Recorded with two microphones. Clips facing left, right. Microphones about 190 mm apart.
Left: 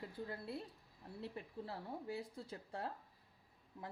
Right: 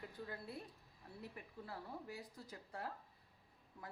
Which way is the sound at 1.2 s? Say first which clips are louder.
Left 6 dB; 30° left (ahead or behind).